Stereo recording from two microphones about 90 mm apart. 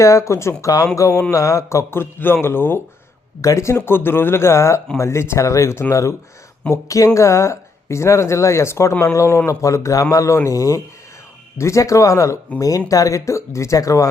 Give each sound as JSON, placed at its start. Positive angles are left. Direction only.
{"t": 0.0, "sound": "a woman's voice", "side_deg": 35}